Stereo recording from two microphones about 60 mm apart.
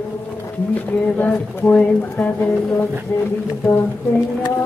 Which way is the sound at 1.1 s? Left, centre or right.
Left.